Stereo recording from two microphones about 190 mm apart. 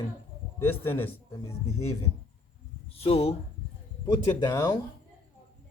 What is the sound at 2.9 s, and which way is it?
Speech, 30° left (ahead or behind).